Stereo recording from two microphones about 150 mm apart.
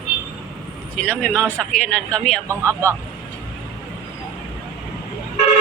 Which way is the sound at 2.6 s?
20° right (ahead or behind).